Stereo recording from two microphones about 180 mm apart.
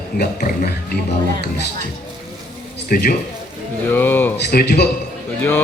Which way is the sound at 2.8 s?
55° left (ahead or behind).